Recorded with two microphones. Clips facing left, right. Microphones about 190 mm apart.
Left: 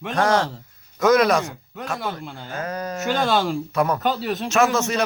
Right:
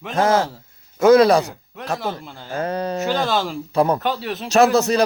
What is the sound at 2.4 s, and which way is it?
Speech, 30° right (ahead or behind).